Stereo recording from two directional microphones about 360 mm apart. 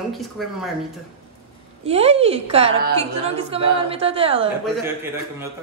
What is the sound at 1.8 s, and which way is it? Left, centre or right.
A woman's voice, centre.